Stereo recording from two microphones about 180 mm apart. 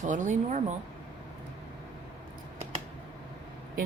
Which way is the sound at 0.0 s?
45° right (ahead or behind).